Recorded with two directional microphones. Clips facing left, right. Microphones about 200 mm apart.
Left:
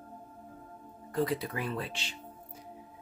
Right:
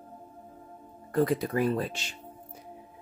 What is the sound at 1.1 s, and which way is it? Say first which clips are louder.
Speech: right 5 dB; 50° right (ahead or behind).